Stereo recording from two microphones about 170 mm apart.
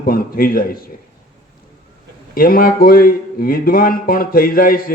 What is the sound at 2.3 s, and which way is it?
Speech, 60° left (ahead or behind).